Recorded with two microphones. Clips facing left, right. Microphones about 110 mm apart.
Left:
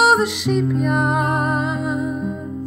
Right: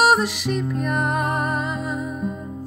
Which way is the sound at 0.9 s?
15° left (ahead or behind).